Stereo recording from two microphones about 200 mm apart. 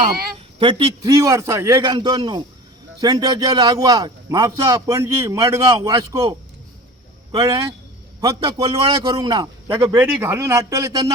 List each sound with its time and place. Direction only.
0.0 s a man's voice: 25° right (ahead or behind)
7.3 s a man's voice: 20° right (ahead or behind)